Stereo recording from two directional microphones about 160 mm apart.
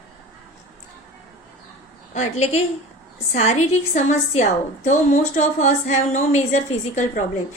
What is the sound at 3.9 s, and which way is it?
Speech, 45° left (ahead or behind).